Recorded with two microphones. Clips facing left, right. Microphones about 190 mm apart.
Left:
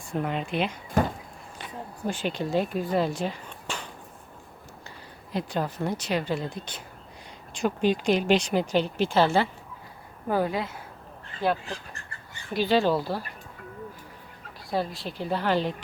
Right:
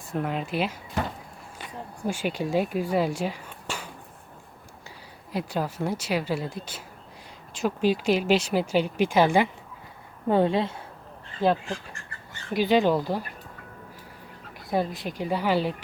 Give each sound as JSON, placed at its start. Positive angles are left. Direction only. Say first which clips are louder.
{"t": 0.1, "sound": "speech", "louder": "even", "side_deg": 0}
{"t": 2.0, "sound": "speech", "louder": "right 1 dB", "side_deg": -10}
{"t": 5.3, "sound": "speech", "louder": "even", "side_deg": -10}
{"t": 10.2, "sound": "speech", "louder": "right 4 dB", "side_deg": -25}
{"t": 12.5, "sound": "speech", "louder": "right 2 dB", "side_deg": -15}
{"t": 14.7, "sound": "speech", "louder": "right 2 dB", "side_deg": -20}